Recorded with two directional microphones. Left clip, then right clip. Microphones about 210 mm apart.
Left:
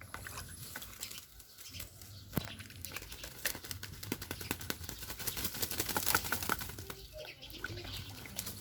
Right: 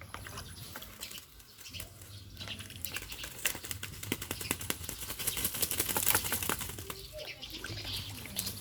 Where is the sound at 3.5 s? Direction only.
5° right (ahead or behind).